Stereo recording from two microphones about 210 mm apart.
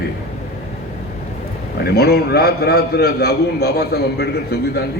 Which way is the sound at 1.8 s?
50° left (ahead or behind).